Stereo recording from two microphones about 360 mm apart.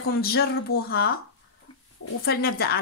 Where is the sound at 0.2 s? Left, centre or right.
Left.